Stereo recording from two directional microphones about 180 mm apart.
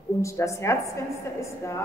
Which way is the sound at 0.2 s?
15° left (ahead or behind).